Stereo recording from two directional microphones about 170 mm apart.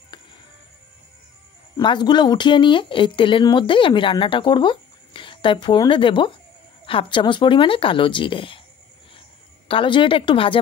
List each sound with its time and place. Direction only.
1.8 s speech: 25° left (ahead or behind)
9.7 s speech: 30° left (ahead or behind)